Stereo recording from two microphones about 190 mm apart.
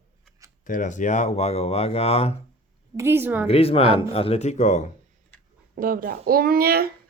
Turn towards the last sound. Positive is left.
turn(degrees=-55)  # may be behind; listen again after turning